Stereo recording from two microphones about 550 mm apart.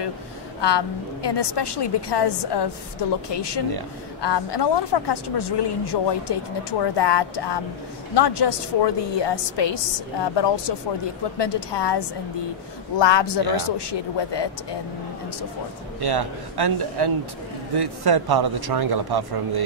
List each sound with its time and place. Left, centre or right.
0.6 s a woman's voice: left
16.0 s a man's voice: right